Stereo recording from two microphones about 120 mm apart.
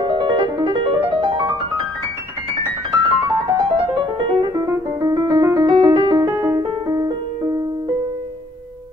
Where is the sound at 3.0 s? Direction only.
35° right (ahead or behind).